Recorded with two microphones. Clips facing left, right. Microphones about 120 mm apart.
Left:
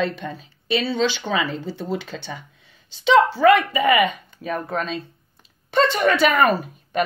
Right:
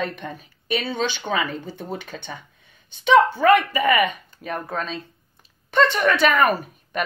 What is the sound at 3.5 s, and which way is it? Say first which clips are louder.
Speech: even; 65° left (ahead or behind).